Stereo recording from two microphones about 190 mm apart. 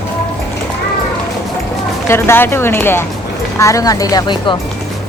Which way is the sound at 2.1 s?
10° left (ahead or behind).